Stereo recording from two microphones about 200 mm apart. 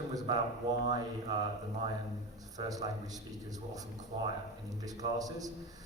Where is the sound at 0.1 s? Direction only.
20° right (ahead or behind).